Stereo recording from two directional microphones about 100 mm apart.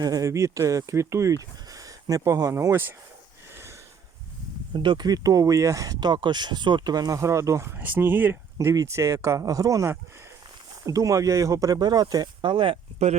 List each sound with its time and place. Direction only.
0.0 s speech: 35° right (ahead or behind)
3.5 s sniff: 25° right (ahead or behind)
4.7 s speech: 55° right (ahead or behind); by 7.7 s 30° right (ahead or behind)
7.8 s speech: 20° right (ahead or behind)
8.5 s speech: 35° right (ahead or behind); by 13.1 s 75° right (ahead or behind)